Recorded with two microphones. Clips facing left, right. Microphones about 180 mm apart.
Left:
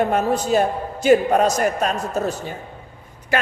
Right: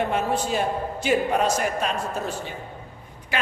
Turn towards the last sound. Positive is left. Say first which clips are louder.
# left 6 dB
turn(degrees=45)  # may be behind; listen again after turning